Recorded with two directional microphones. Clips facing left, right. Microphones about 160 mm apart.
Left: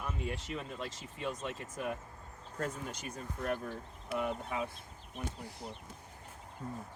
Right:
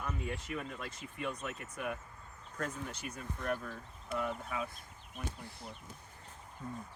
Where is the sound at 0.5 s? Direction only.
25° left (ahead or behind).